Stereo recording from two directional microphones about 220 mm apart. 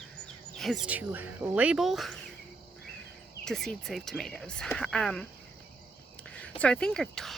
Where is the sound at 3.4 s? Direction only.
Centre (ahead or behind).